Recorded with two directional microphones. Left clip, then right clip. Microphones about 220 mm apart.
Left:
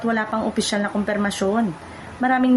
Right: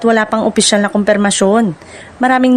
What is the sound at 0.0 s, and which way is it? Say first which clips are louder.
Speech: right 10 dB; 45° right (ahead or behind).